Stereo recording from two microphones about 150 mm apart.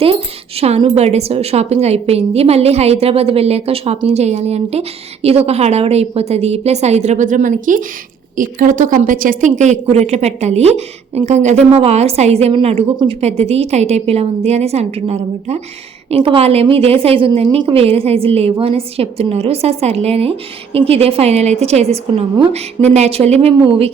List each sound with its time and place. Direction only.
0.0 s a woman's voice: 40° right (ahead or behind)